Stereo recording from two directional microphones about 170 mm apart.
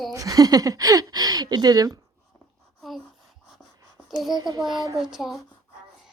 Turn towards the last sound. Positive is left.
turn(degrees=0)  # may be behind; listen again after turning